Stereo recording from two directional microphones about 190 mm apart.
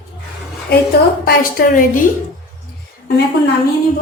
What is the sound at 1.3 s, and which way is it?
Speech, 50° left (ahead or behind).